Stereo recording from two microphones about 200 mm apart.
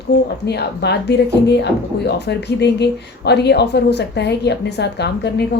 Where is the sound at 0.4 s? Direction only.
55° left (ahead or behind).